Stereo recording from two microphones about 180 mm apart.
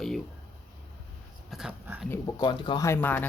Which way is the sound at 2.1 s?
20° left (ahead or behind).